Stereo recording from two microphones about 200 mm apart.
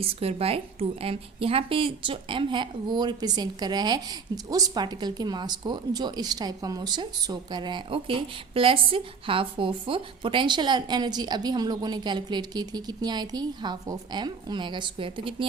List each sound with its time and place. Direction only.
0.0 s speech: 30° right (ahead or behind)